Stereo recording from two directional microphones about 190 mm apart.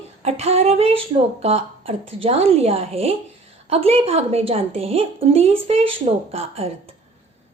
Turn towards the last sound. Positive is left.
turn(degrees=-30)  # may be behind; listen again after turning